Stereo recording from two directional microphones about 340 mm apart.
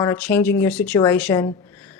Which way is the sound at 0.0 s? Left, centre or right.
Centre.